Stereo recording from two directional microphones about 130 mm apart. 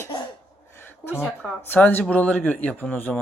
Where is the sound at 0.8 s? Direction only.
15° left (ahead or behind).